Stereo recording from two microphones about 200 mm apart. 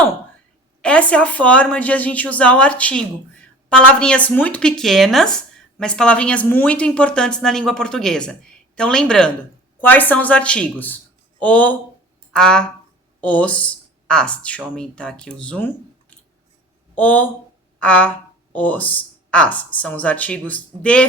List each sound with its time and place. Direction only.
0.8 s a woman's voice: 5° left (ahead or behind)
16.9 s speech: 10° left (ahead or behind)